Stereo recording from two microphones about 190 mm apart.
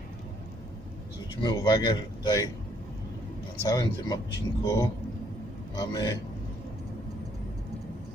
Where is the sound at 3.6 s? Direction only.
20° left (ahead or behind).